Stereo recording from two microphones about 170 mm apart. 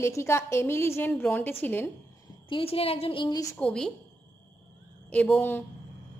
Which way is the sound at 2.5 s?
35° left (ahead or behind).